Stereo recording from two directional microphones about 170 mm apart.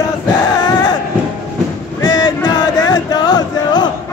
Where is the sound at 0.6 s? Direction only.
25° left (ahead or behind).